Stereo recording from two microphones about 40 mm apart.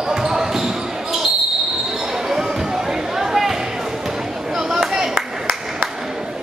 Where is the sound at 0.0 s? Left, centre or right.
Centre.